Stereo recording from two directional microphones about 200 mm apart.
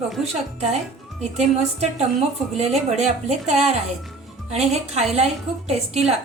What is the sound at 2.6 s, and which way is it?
A woman's voice, 30° right (ahead or behind).